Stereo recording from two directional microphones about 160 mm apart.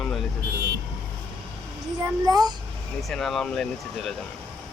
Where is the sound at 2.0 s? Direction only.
25° right (ahead or behind).